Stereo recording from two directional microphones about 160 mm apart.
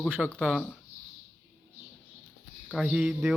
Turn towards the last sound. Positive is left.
turn(degrees=-5)  # may be behind; listen again after turning